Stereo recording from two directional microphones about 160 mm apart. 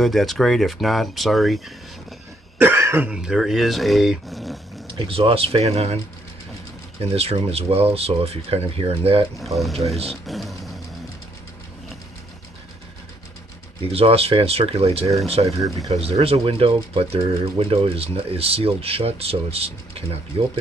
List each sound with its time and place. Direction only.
0.0 s speech: centre (ahead or behind)
2.6 s speech: 15° right (ahead or behind)
4.8 s speech: 35° right (ahead or behind)
7.0 s speech: 40° right (ahead or behind)
10.2 s speech: centre (ahead or behind)
13.8 s speech: 40° right (ahead or behind)